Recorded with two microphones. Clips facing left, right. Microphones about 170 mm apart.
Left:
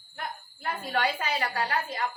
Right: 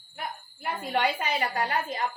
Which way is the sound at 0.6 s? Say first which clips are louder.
Right 1 dB; 15° right (ahead or behind).